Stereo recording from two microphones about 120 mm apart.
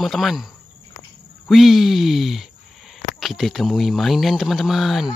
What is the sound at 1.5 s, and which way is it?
Speech, centre (ahead or behind).